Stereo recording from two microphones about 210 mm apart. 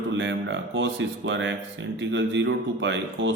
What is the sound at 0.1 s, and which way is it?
Speech, 60° right (ahead or behind).